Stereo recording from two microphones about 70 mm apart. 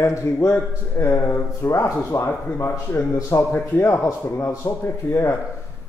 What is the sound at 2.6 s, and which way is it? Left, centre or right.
Speech, left.